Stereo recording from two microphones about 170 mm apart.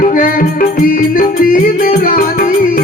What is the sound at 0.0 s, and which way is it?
Music, 50° left (ahead or behind).